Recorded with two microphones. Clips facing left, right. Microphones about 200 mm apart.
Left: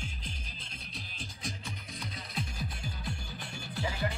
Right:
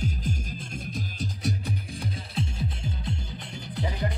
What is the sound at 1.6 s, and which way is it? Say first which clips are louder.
Music: right 9 dB; 30° right (ahead or behind).